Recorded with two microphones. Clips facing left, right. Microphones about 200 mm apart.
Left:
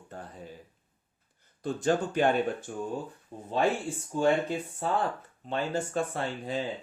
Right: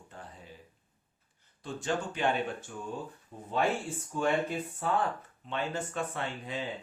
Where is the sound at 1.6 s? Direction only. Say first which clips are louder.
Left 6 dB; 40° left (ahead or behind).